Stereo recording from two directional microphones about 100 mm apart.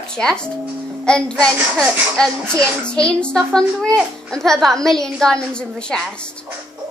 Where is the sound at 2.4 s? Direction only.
20° right (ahead or behind).